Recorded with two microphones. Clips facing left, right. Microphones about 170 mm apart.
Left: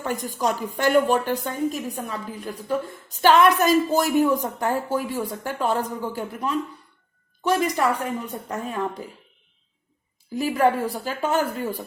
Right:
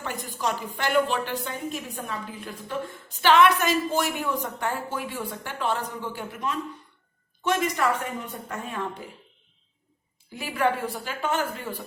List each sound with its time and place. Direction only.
0.0 s a woman's voice: 45° left (ahead or behind)
10.3 s a woman's voice: 40° left (ahead or behind)